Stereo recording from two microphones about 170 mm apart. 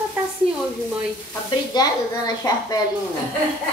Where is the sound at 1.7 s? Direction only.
25° left (ahead or behind).